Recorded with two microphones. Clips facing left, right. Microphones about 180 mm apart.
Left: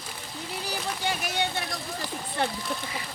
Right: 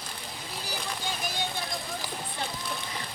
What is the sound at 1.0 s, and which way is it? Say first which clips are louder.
Vehicle: left 6 dB; 70° left (ahead or behind).